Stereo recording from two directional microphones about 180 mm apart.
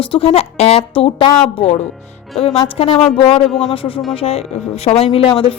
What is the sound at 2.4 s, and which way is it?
A woman's voice, 30° left (ahead or behind).